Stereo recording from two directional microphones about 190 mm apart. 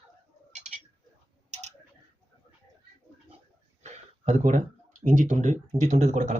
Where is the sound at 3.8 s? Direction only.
35° right (ahead or behind).